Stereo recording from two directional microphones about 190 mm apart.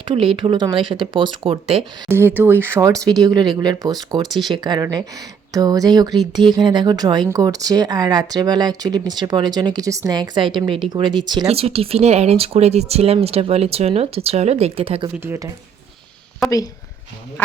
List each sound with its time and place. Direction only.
0.0 s speech: 25° right (ahead or behind)
2.0 s speech: 10° right (ahead or behind); by 15.1 s 30° right (ahead or behind)
15.2 s speech: 15° right (ahead or behind)